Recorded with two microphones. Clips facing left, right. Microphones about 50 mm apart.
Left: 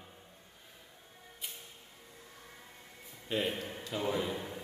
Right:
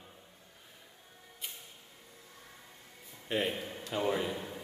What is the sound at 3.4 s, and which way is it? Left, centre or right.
Speech, centre.